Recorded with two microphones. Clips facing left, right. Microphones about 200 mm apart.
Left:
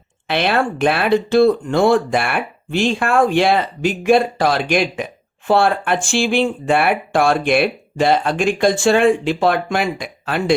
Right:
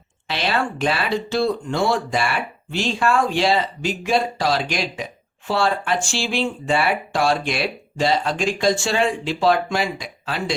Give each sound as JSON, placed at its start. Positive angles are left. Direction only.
{"t": 0.3, "sound": "speech", "side_deg": 55}